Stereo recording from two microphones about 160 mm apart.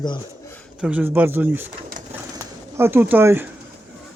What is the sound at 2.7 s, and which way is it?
Speech, 15° right (ahead or behind).